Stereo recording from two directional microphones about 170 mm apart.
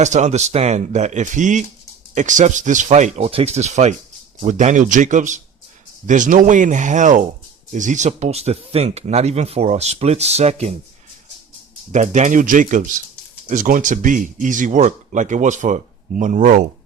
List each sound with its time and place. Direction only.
0.0 s speech: 45° right (ahead or behind)
11.9 s speech: 45° right (ahead or behind)